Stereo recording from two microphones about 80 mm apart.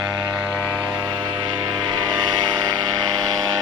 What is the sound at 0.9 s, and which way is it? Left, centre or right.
Mains hum, right.